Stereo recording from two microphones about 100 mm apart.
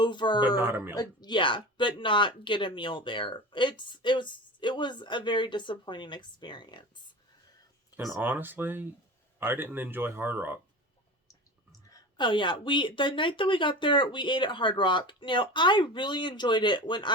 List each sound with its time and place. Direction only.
0.0 s speech: 50° left (ahead or behind)
8.2 s speech: 20° right (ahead or behind)
12.1 s speech: 55° left (ahead or behind)